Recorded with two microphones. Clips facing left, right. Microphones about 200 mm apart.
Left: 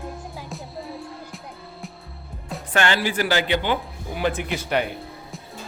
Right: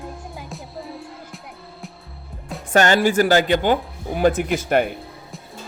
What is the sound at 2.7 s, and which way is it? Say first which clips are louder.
Speech: right 6 dB; 45° right (ahead or behind).